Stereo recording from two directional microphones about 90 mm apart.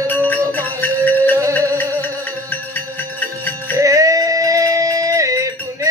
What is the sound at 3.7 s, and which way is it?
Music, 35° right (ahead or behind).